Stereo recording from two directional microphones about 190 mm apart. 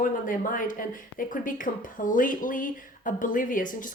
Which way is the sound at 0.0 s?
45° left (ahead or behind).